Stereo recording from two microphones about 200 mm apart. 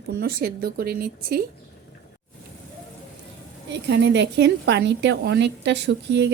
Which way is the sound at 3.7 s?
60° right (ahead or behind).